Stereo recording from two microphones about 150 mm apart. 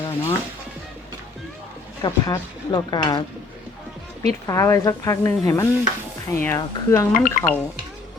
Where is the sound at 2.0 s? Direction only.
30° left (ahead or behind).